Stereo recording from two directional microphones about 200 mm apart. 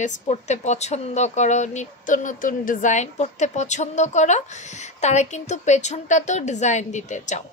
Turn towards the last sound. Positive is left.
turn(degrees=35)  # may be behind; listen again after turning